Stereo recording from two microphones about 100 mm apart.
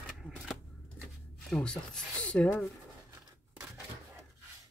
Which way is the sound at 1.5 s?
10° left (ahead or behind).